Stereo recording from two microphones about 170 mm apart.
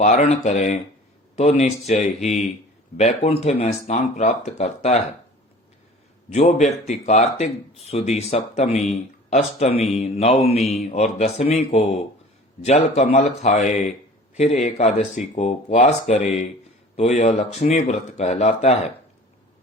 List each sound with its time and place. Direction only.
0.0 s speech: 40° left (ahead or behind)
6.3 s speech: 40° left (ahead or behind)